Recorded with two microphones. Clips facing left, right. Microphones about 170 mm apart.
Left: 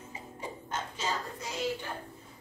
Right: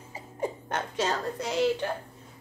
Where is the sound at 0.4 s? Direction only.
65° right (ahead or behind).